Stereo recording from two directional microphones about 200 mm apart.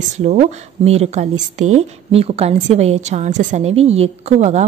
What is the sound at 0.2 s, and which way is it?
A woman's voice, 35° right (ahead or behind).